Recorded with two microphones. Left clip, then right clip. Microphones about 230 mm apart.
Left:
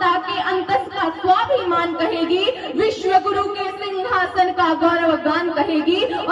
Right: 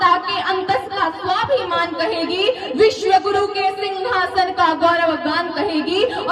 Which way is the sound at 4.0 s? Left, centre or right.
Right.